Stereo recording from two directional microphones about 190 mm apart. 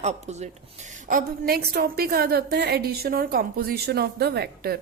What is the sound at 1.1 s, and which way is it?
A woman's voice, 50° right (ahead or behind).